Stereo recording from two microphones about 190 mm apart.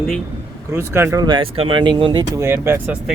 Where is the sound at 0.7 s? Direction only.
10° right (ahead or behind).